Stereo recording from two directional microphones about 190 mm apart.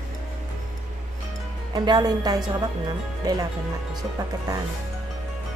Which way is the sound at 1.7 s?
20° right (ahead or behind).